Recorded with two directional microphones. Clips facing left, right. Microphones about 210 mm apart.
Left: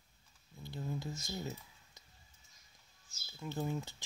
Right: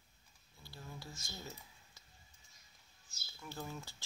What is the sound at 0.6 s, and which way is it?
Speech, 20° left (ahead or behind).